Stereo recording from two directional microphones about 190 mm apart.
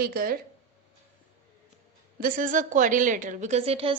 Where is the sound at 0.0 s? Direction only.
50° right (ahead or behind).